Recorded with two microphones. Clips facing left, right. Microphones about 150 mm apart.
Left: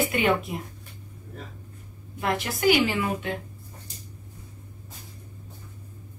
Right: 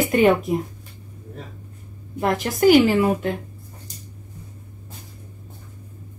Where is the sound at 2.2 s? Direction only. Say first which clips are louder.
Right 6 dB; 45° right (ahead or behind).